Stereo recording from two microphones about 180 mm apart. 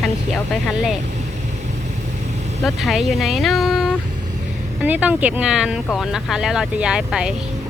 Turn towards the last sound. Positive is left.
turn(degrees=-5)  # may be behind; listen again after turning